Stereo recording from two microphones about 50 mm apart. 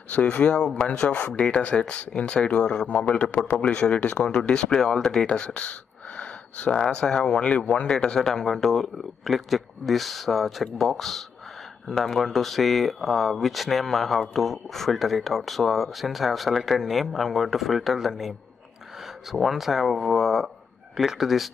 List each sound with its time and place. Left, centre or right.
0.1 s speech: left; by 18.3 s centre
19.4 s speech: centre